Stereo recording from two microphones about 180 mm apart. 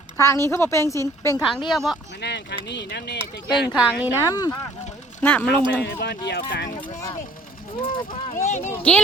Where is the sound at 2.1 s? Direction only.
70° left (ahead or behind).